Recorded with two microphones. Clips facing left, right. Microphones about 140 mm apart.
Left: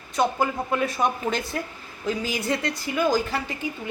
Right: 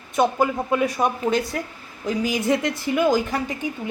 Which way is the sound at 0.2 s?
20° right (ahead or behind).